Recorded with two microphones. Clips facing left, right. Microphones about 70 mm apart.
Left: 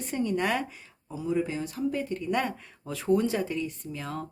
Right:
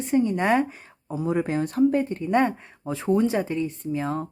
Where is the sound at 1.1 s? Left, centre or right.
Right.